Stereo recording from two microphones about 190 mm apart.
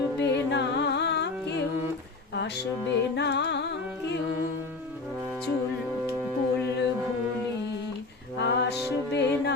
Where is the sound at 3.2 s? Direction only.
65° left (ahead or behind).